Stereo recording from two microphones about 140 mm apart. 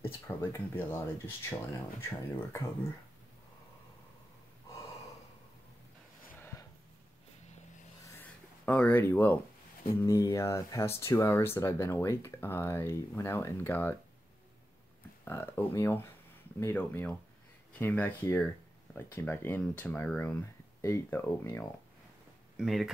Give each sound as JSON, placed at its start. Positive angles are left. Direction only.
{"t": 0.4, "sound": "speech", "side_deg": 15}
{"t": 6.4, "sound": "a sound", "side_deg": 20}
{"t": 8.2, "sound": "a sound", "side_deg": 10}
{"t": 10.0, "sound": "speech", "side_deg": 25}
{"t": 15.2, "sound": "speech", "side_deg": 15}
{"t": 22.6, "sound": "speech", "side_deg": 0}